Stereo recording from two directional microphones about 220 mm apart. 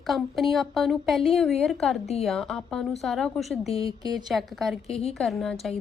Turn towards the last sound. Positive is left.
turn(degrees=0)  # may be behind; listen again after turning